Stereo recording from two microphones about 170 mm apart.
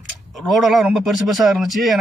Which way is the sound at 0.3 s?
Centre (ahead or behind).